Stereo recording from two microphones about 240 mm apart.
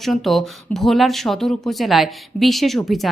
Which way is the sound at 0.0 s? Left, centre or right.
Centre.